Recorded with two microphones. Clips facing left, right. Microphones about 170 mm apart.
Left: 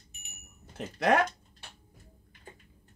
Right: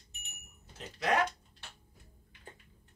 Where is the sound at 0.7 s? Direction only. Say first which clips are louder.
Left 6 dB; 60° left (ahead or behind).